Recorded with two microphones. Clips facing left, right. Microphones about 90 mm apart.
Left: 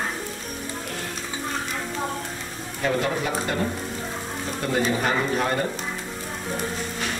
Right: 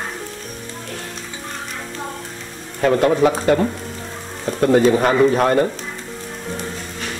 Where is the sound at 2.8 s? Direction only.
60° right (ahead or behind).